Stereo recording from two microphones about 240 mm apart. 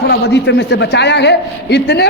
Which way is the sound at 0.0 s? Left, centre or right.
Left.